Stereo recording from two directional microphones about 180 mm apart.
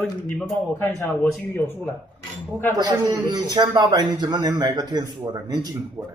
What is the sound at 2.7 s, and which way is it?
A man's voice, 20° right (ahead or behind).